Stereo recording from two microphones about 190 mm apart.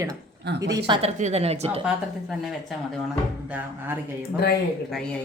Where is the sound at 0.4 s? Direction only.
60° right (ahead or behind).